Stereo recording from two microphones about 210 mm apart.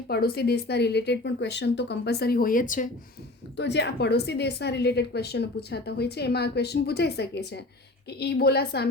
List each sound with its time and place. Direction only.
0.1 s speech: 50° left (ahead or behind)
3.6 s speech: 55° left (ahead or behind)